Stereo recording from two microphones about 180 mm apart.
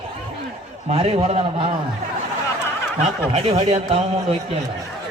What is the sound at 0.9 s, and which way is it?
Speech, 30° right (ahead or behind).